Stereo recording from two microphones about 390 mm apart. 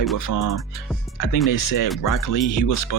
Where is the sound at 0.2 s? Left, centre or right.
Left.